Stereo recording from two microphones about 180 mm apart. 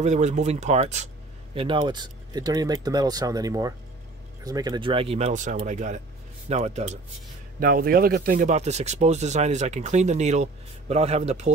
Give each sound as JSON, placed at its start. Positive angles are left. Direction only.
{"t": 0.0, "sound": "speech", "side_deg": -40}
{"t": 1.5, "sound": "speech", "side_deg": -30}
{"t": 7.6, "sound": "speech", "side_deg": -55}